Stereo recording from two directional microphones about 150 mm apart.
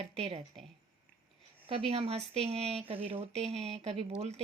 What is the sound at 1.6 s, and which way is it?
Speech, 40° right (ahead or behind).